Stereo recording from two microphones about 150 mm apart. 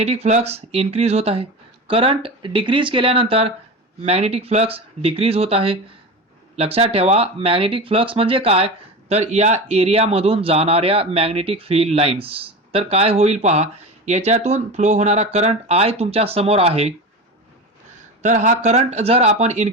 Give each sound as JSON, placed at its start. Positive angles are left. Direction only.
{"t": 0.0, "sound": "speech", "side_deg": -45}
{"t": 18.2, "sound": "speech", "side_deg": -50}